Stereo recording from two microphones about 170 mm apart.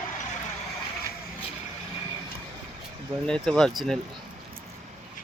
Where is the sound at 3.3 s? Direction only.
5° left (ahead or behind).